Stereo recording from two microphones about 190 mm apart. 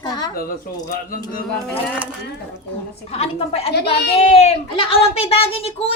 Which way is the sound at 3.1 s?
30° left (ahead or behind).